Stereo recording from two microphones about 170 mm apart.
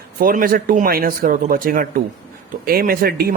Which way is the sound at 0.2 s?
55° right (ahead or behind).